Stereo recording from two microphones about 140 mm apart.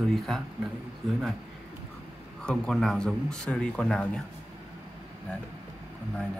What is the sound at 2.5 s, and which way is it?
Speech, 5° left (ahead or behind).